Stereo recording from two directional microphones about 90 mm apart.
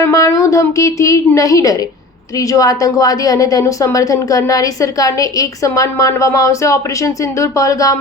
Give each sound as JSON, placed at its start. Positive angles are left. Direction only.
{"t": 0.0, "sound": "a woman's voice", "side_deg": 35}